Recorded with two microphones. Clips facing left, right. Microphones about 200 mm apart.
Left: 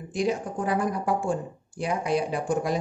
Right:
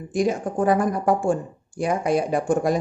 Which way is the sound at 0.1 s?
50° right (ahead or behind).